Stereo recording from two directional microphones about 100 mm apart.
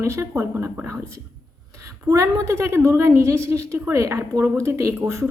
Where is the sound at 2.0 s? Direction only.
35° right (ahead or behind).